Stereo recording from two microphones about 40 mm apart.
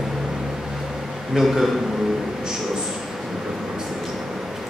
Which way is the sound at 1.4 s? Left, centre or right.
Centre.